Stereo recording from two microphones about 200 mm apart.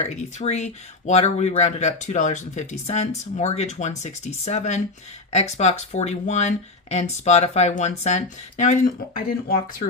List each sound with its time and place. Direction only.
0.0 s speech: 35° left (ahead or behind)